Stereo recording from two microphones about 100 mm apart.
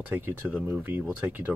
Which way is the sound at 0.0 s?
20° right (ahead or behind).